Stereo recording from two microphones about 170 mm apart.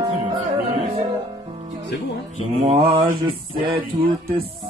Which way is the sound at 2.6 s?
30° right (ahead or behind).